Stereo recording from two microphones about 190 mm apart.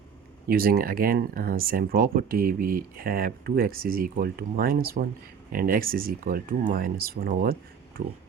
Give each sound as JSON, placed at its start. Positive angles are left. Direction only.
{"t": 0.4, "sound": "speech", "side_deg": -50}